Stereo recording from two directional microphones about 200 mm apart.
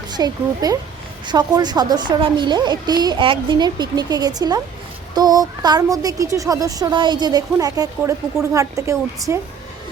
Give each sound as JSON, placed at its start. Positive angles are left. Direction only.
{"t": 0.1, "sound": "a woman's voice", "side_deg": -20}